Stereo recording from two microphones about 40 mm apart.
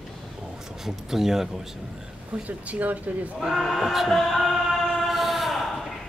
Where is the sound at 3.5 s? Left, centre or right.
Centre.